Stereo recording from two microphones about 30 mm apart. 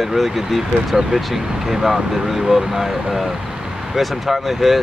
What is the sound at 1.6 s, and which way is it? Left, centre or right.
Speech, centre.